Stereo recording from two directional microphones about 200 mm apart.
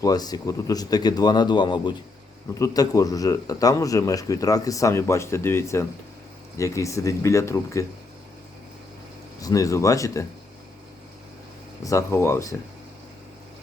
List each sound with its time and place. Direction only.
0.0 s speech: 20° left (ahead or behind)
9.4 s speech: 15° left (ahead or behind)
11.9 s speech: 15° left (ahead or behind)